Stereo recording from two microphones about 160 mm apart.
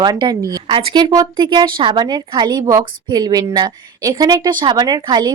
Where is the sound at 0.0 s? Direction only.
30° right (ahead or behind).